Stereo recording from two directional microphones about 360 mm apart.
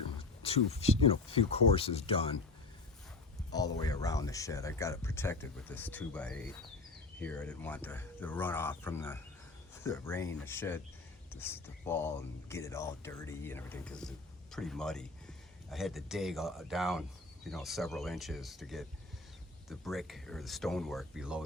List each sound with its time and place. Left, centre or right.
0.4 s speech: centre
3.5 s speech: centre